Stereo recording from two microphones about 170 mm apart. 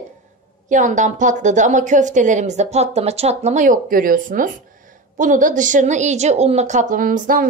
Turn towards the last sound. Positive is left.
turn(degrees=-55)  # may be behind; listen again after turning